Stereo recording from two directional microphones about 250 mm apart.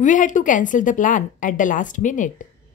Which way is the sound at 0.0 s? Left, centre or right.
Left.